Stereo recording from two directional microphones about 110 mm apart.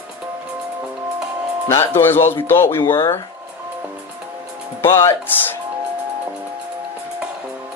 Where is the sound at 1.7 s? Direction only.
20° left (ahead or behind).